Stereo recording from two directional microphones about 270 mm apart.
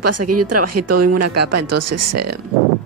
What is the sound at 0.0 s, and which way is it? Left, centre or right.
Speech, right.